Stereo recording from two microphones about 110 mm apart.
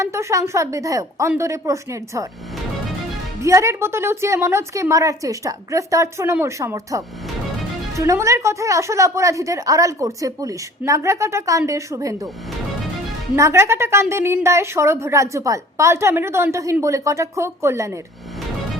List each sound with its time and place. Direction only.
0.0 s a woman's voice: 25° right (ahead or behind)
3.4 s a woman's voice: 30° right (ahead or behind)
13.3 s a woman's voice: 25° right (ahead or behind)